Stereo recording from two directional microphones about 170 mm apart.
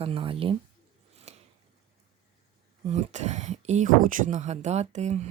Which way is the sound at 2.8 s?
40° right (ahead or behind).